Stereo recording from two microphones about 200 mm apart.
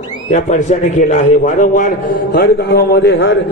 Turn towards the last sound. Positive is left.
turn(degrees=60)  # may be behind; listen again after turning